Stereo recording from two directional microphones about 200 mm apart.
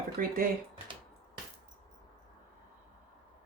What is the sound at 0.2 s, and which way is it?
Speech, 45° right (ahead or behind).